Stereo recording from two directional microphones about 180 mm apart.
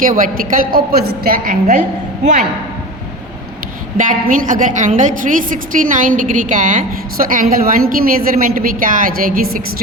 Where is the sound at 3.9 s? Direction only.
45° right (ahead or behind).